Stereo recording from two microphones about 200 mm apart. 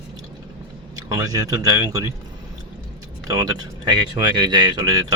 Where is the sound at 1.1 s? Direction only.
20° right (ahead or behind).